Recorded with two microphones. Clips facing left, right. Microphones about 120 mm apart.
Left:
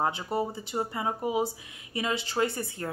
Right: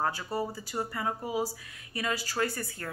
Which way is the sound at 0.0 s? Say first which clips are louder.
Left 3 dB; 20° left (ahead or behind).